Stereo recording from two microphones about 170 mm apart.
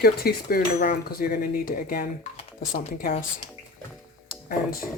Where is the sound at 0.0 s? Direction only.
65° left (ahead or behind).